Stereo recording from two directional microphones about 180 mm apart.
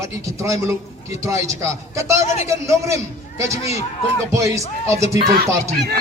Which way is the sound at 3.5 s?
35° left (ahead or behind).